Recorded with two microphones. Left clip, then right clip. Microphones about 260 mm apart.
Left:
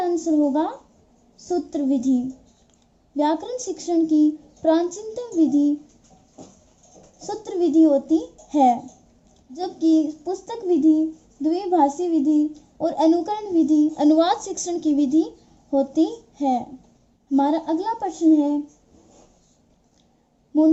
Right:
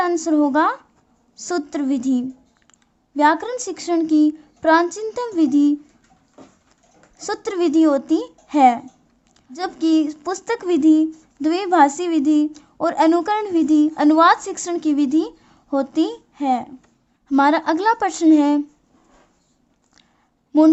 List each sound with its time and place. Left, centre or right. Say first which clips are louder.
0.0 s a sound: right 3 dB; right
0.5 s a woman's voice: right 6 dB; right
3.2 s a woman's voice: right 6 dB; right
7.2 s a woman's voice: right 3 dB; right
17.2 s a woman's voice: right 5 dB; right